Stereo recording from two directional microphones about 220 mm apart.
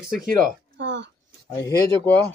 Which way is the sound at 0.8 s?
55° right (ahead or behind).